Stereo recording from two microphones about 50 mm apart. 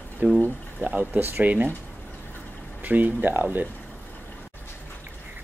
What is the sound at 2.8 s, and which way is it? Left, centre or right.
Speech, right.